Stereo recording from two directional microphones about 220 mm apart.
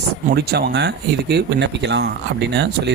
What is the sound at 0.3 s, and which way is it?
Speech, 45° right (ahead or behind).